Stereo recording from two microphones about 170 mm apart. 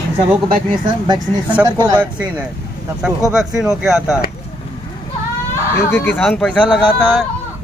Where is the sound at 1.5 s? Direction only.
10° right (ahead or behind).